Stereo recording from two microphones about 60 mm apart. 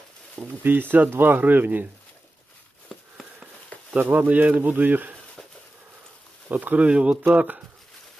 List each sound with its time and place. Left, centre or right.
0.3 s speech: right
3.9 s speech: right
6.5 s speech: right